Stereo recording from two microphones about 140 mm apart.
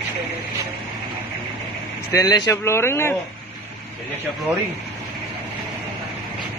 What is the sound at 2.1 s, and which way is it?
Speech, 30° left (ahead or behind).